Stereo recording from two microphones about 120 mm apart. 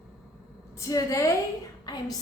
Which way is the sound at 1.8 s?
35° left (ahead or behind).